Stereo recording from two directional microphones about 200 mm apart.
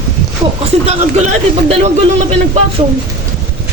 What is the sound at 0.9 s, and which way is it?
Speech, 35° right (ahead or behind).